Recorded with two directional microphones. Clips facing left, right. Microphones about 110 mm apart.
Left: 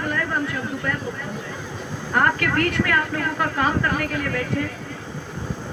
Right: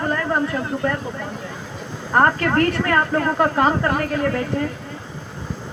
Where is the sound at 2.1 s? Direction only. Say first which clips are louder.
Right 4 dB; 35° right (ahead or behind).